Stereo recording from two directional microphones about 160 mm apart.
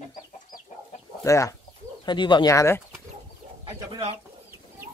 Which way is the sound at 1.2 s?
20° left (ahead or behind).